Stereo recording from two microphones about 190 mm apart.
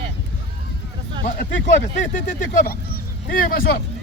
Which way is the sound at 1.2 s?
65° left (ahead or behind).